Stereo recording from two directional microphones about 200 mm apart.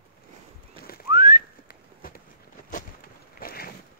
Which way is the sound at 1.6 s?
45° left (ahead or behind).